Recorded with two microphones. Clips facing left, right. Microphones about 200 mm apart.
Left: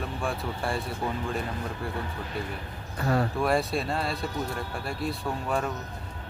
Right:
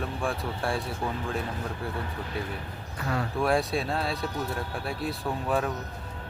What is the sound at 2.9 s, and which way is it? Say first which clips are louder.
Speech: left 5 dB; 40° left (ahead or behind).